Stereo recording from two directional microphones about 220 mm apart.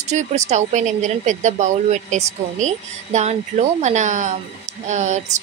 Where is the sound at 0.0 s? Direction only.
30° right (ahead or behind).